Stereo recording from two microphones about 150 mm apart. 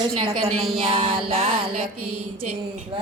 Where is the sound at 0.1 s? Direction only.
40° right (ahead or behind).